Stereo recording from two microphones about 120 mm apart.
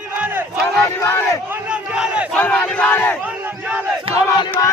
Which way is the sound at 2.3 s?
15° left (ahead or behind).